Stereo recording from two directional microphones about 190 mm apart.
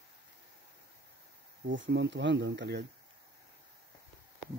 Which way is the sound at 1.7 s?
70° right (ahead or behind).